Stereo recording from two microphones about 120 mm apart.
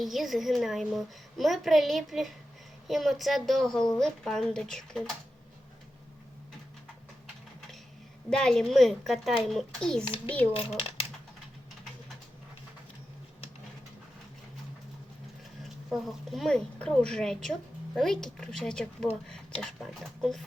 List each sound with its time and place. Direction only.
0.0 s a woman's voice: centre (ahead or behind)
8.3 s a woman's voice: 5° left (ahead or behind)
10.8 s speech: 50° left (ahead or behind)
15.9 s a woman's voice: centre (ahead or behind)